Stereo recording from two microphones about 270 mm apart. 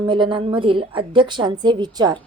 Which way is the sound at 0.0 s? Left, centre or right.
Centre.